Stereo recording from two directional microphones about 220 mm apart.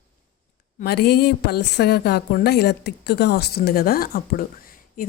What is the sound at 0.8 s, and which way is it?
A woman's voice, 45° left (ahead or behind).